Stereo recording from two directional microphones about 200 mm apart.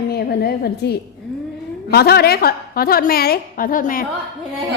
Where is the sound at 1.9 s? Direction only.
50° left (ahead or behind).